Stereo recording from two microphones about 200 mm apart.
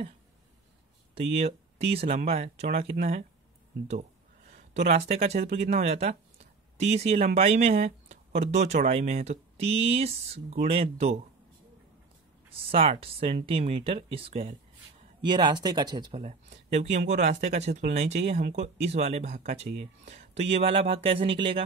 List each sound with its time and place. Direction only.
1.1 s speech: 30° right (ahead or behind)
4.5 s speech: 35° right (ahead or behind)
12.5 s speech: 30° right (ahead or behind)
16.2 s speech: 35° right (ahead or behind)